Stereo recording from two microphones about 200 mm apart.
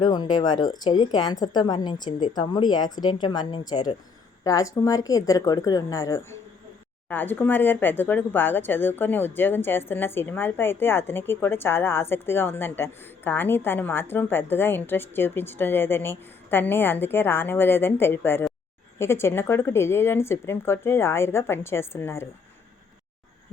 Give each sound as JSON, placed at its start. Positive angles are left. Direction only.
{"t": 0.0, "sound": "a woman's voice", "side_deg": 20}